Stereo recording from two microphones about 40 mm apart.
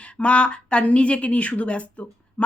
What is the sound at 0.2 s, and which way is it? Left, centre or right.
Speech, left.